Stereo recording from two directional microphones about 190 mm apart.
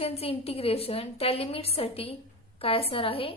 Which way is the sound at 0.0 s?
30° left (ahead or behind).